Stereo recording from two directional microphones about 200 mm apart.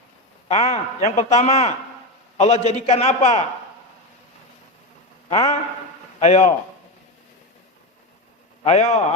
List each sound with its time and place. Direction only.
0.4 s a man's voice: 30° left (ahead or behind)
5.3 s a man's voice: 30° left (ahead or behind)
8.6 s a man's voice: 30° left (ahead or behind)